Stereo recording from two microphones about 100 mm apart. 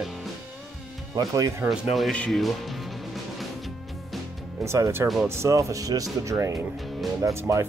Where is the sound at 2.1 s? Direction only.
10° left (ahead or behind).